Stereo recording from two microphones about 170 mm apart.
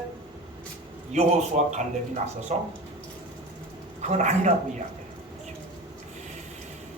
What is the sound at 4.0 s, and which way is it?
Speech, 45° right (ahead or behind).